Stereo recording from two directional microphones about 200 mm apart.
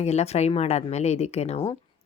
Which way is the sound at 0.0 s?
30° left (ahead or behind).